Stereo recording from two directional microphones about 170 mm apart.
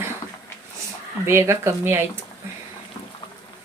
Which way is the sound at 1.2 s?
15° right (ahead or behind).